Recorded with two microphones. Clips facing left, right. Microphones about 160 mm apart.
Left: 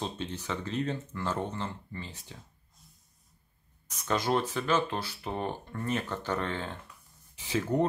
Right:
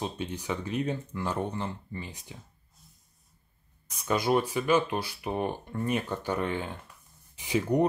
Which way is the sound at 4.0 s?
10° right (ahead or behind).